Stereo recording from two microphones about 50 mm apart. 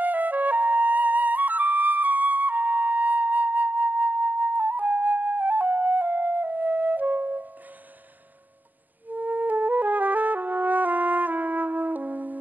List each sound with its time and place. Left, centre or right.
0.0 s flute: right
9.0 s flute: right